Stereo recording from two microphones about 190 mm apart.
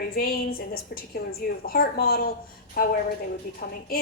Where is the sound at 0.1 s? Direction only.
50° left (ahead or behind).